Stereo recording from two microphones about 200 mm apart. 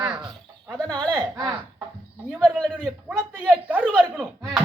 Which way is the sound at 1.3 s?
20° right (ahead or behind).